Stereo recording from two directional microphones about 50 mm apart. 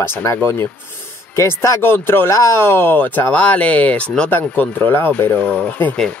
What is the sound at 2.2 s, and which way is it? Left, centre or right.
Speech, left.